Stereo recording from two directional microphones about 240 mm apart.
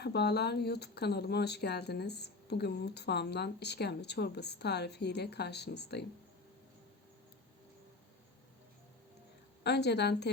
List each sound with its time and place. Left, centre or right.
0.0 s speech: left
9.6 s speech: left